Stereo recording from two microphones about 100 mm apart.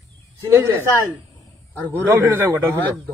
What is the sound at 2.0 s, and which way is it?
Speech, 25° right (ahead or behind).